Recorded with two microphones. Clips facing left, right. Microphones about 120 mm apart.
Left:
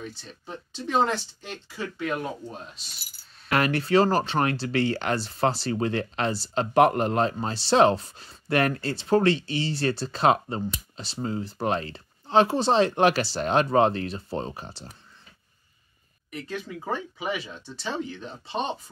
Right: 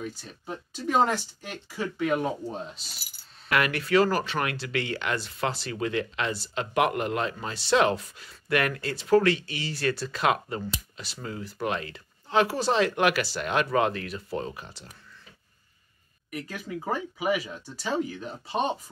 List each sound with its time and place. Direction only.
0.0 s speech: 10° right (ahead or behind)
3.4 s speech: 35° left (ahead or behind)
16.3 s speech: 10° right (ahead or behind)